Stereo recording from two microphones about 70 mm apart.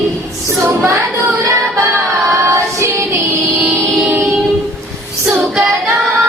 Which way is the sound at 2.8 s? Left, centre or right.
Right.